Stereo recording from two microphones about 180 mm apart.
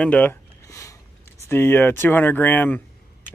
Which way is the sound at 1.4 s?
15° left (ahead or behind).